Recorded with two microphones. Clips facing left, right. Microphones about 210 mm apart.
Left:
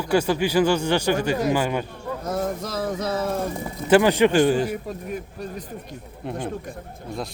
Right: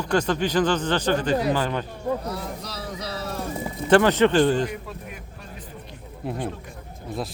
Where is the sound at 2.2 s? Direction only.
45° left (ahead or behind).